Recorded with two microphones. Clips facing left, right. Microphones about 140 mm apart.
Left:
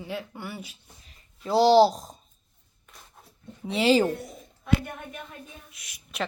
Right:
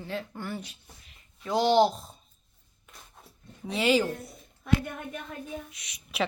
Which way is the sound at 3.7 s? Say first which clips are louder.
Left 3 dB; 25° left (ahead or behind).